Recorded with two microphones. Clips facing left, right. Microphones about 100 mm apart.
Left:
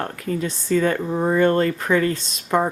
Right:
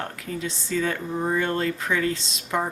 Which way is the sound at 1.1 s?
75° left (ahead or behind).